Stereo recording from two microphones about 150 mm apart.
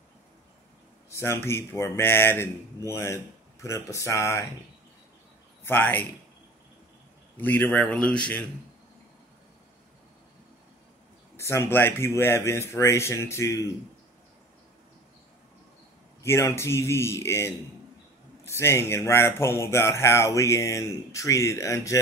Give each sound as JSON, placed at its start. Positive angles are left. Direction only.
{"t": 1.1, "sound": "speech", "side_deg": 15}
{"t": 5.7, "sound": "speech", "side_deg": 10}
{"t": 7.3, "sound": "speech", "side_deg": 10}
{"t": 11.3, "sound": "speech", "side_deg": 15}
{"t": 16.2, "sound": "speech", "side_deg": 20}